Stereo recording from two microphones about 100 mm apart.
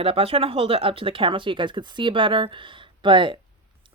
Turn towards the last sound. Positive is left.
turn(degrees=-55)  # may be behind; listen again after turning